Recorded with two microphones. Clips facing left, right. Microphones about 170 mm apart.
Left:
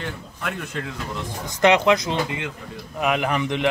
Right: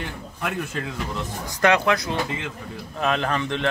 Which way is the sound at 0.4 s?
Centre (ahead or behind).